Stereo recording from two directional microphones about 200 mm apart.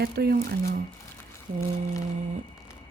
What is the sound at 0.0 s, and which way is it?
Speech, 55° right (ahead or behind).